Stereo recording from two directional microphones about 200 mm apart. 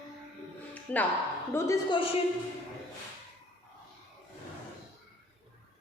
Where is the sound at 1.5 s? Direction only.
20° left (ahead or behind).